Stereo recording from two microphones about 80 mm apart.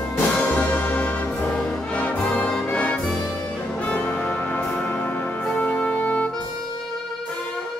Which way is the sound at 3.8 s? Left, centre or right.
Left.